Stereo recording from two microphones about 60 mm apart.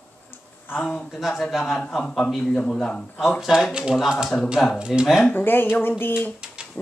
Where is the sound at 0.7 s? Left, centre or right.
Left.